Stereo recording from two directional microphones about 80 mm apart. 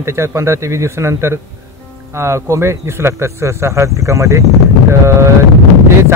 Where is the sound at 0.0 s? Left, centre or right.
Right.